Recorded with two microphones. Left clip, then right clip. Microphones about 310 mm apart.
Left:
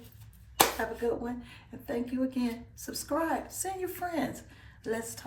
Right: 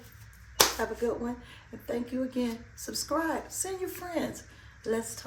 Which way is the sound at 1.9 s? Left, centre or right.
Centre.